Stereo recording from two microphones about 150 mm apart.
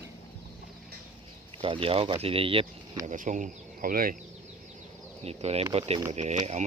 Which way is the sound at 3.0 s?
55° right (ahead or behind).